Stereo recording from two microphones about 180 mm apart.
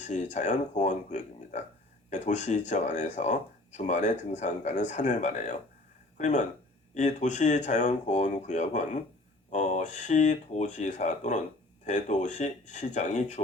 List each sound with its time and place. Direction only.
0.0 s speech: 40° left (ahead or behind)